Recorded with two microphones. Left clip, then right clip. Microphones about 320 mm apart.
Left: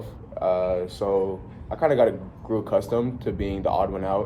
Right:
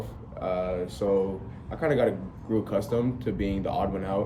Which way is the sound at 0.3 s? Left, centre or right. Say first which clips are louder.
Left 6 dB; centre.